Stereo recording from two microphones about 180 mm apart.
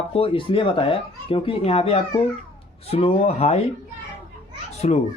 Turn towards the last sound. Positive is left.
turn(degrees=40)  # may be behind; listen again after turning